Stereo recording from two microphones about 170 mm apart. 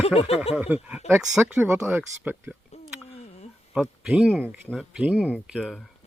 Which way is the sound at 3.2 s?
40° left (ahead or behind).